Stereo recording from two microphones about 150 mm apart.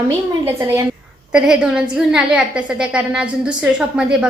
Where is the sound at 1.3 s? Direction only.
5° right (ahead or behind).